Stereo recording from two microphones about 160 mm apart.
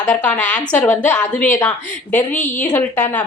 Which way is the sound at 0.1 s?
10° left (ahead or behind).